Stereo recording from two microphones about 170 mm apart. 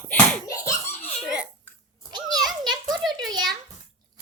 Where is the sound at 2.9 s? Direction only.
Centre (ahead or behind).